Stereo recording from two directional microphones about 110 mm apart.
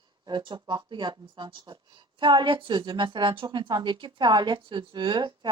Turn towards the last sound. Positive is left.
turn(degrees=-45)  # may be behind; listen again after turning